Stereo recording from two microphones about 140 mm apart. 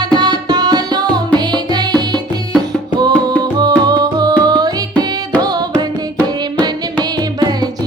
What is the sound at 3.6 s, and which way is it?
Music, 30° right (ahead or behind).